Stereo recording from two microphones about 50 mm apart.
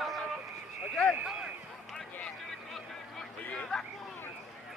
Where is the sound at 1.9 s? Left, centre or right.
Centre.